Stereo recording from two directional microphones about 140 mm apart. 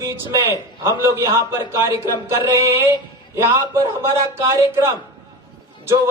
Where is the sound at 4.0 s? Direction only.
20° right (ahead or behind).